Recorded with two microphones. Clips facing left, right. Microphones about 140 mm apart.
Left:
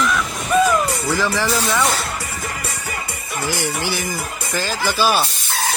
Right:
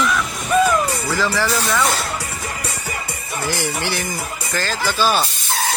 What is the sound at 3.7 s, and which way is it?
Speech, centre (ahead or behind).